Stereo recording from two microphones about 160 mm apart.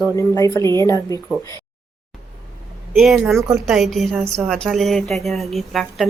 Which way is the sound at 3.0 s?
Centre (ahead or behind).